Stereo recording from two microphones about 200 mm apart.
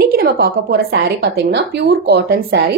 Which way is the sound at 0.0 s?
45° right (ahead or behind).